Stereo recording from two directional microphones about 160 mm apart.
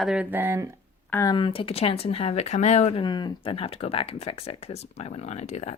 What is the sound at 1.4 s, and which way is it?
Speech, 35° left (ahead or behind).